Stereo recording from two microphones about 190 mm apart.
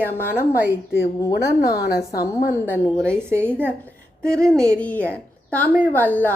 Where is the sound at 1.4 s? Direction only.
55° left (ahead or behind).